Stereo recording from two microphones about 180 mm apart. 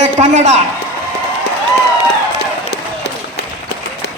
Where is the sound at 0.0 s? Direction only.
40° right (ahead or behind).